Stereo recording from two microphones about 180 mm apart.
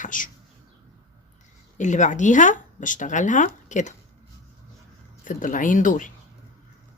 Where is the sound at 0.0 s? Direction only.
45° left (ahead or behind).